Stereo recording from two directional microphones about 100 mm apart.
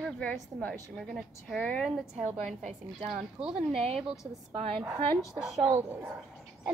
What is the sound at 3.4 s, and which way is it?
Speech, 5° right (ahead or behind).